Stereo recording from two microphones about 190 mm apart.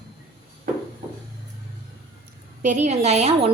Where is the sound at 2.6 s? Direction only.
40° right (ahead or behind).